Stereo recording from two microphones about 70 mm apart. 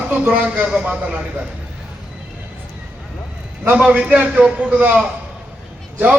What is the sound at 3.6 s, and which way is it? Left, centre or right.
A man's voice, centre.